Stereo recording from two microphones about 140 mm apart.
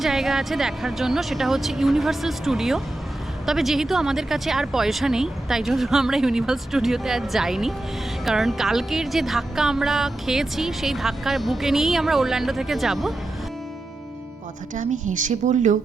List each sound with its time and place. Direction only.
0.0 s speech: centre (ahead or behind)
14.8 s a woman's voice: 65° right (ahead or behind)